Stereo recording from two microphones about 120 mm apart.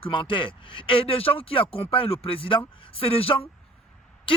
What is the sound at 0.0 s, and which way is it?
Speech, 45° left (ahead or behind).